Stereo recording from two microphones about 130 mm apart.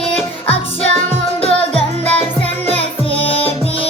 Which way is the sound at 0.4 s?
50° left (ahead or behind).